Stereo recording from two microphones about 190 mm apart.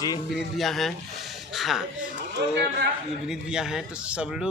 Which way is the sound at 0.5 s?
Centre (ahead or behind).